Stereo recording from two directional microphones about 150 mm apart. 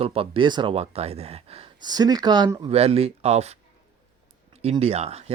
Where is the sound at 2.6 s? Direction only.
40° right (ahead or behind).